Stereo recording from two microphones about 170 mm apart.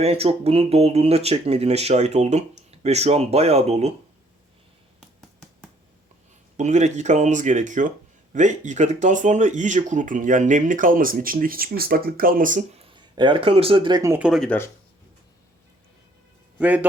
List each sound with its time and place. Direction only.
0.0 s speech: 35° right (ahead or behind)
6.6 s speech: 45° right (ahead or behind)
12.8 s speech: 30° right (ahead or behind)
14.1 s speech: 5° right (ahead or behind)
16.6 s a man's voice: 10° right (ahead or behind)